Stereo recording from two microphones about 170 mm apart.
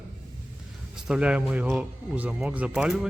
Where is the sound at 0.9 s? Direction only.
5° right (ahead or behind).